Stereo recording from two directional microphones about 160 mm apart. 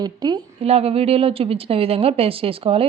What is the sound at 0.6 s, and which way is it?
Speech, 40° right (ahead or behind).